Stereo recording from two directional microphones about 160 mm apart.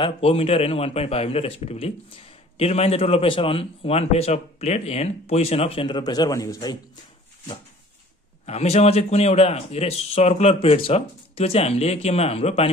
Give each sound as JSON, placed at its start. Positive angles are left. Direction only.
{"t": 0.0, "sound": "a man's voice", "side_deg": 40}
{"t": 8.5, "sound": "a man's voice", "side_deg": 40}